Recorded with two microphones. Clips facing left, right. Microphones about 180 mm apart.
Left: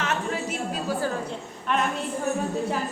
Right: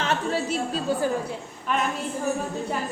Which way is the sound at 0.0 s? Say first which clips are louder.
Right 2 dB; 30° right (ahead or behind).